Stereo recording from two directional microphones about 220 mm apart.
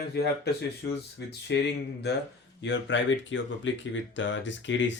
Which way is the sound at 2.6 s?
55° left (ahead or behind).